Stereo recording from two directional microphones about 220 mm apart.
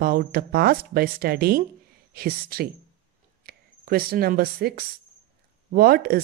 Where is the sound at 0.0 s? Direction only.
40° right (ahead or behind).